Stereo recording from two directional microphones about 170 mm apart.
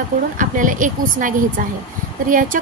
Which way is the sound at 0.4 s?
50° right (ahead or behind).